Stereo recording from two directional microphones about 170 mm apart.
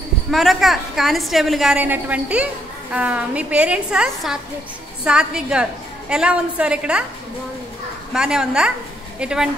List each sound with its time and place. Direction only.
0.3 s a woman's voice: centre (ahead or behind)
8.1 s a woman's voice: 5° right (ahead or behind)